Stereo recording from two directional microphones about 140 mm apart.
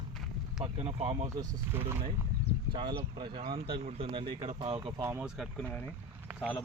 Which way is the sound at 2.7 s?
35° right (ahead or behind).